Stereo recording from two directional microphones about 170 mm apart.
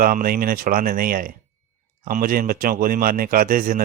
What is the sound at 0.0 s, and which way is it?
A man's voice, 55° right (ahead or behind).